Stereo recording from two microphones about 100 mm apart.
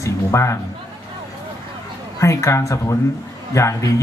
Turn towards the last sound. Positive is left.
turn(degrees=30)  # may be behind; listen again after turning